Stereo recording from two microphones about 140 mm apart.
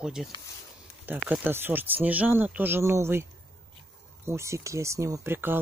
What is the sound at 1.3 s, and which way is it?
Speech, 15° right (ahead or behind).